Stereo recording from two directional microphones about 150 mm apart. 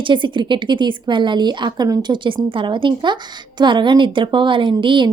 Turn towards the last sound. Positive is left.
turn(degrees=-30)  # may be behind; listen again after turning